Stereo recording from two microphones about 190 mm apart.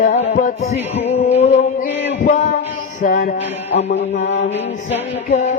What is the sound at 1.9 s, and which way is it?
Music, 65° left (ahead or behind).